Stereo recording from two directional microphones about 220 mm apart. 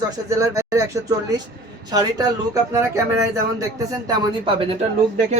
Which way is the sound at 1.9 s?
15° right (ahead or behind).